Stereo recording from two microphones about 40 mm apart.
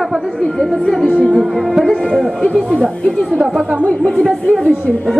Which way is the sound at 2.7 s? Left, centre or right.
Centre.